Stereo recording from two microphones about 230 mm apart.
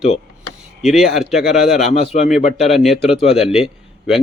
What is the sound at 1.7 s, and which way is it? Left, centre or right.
Speech, left.